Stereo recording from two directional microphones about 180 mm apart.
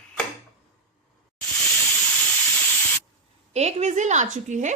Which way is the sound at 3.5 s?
40° right (ahead or behind).